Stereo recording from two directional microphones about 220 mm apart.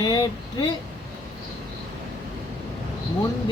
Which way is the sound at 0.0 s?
20° left (ahead or behind).